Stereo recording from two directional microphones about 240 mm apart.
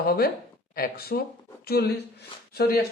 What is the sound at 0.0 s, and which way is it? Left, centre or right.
Speech, left.